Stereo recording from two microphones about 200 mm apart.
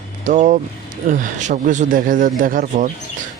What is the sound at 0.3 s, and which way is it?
Speech, 40° right (ahead or behind).